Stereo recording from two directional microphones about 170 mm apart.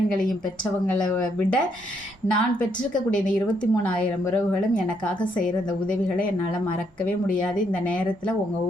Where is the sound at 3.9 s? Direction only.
10° left (ahead or behind).